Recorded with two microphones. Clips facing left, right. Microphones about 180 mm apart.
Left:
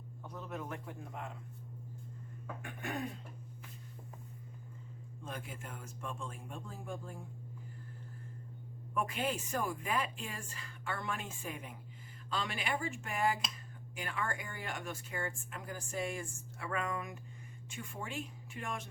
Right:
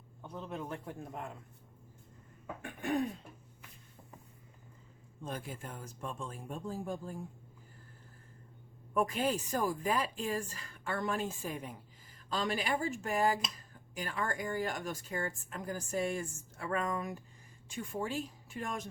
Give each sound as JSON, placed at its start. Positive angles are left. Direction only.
{"t": 0.2, "sound": "speech", "side_deg": -30}
{"t": 5.2, "sound": "speech", "side_deg": -35}
{"t": 9.0, "sound": "speech", "side_deg": -40}